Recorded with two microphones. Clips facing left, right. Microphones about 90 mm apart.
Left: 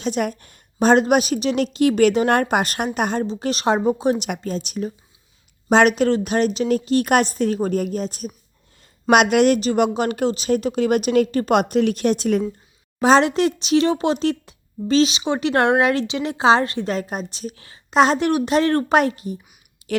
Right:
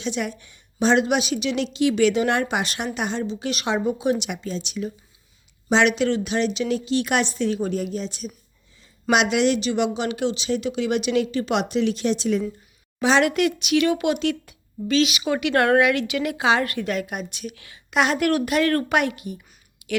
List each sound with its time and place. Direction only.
0.0 s a woman's voice: 45° left (ahead or behind)
4.3 s a woman's voice: 50° left (ahead or behind)
13.0 s a woman's voice: 40° left (ahead or behind)
18.3 s a woman's voice: 20° left (ahead or behind)
19.8 s a sound: 35° left (ahead or behind)